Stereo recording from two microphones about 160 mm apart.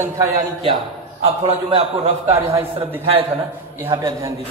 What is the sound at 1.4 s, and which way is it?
A man's voice, 40° right (ahead or behind).